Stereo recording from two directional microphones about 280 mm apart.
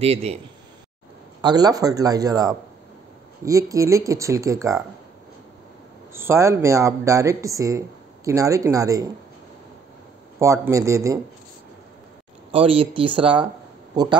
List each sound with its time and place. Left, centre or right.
0.0 s speech: right
1.4 s speech: centre
6.1 s speech: centre
10.4 s speech: centre
12.4 s speech: centre